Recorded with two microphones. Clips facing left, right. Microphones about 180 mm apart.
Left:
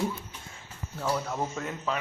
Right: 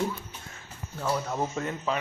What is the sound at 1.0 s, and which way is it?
Speech, 5° right (ahead or behind).